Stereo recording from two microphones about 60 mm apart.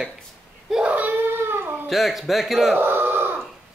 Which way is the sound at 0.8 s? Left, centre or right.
Right.